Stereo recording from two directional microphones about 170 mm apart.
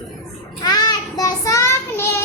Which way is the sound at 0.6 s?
25° left (ahead or behind).